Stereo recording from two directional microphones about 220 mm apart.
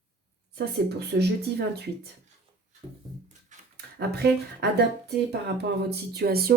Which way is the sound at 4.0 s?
50° right (ahead or behind).